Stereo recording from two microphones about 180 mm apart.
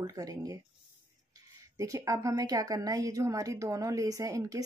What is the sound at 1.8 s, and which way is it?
A woman's voice, 20° right (ahead or behind).